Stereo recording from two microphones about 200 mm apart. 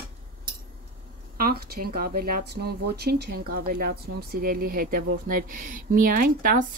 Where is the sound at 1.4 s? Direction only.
50° right (ahead or behind).